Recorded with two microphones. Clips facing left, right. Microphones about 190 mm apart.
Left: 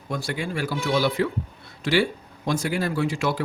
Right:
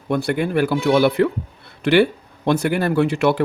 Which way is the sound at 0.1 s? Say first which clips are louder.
Right 9 dB; 60° right (ahead or behind).